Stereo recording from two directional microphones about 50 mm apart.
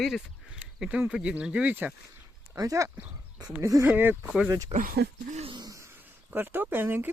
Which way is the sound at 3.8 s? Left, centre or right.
Right.